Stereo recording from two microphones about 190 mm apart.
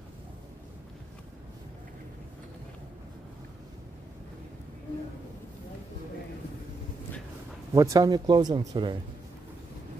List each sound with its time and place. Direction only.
7.7 s speech: 15° right (ahead or behind)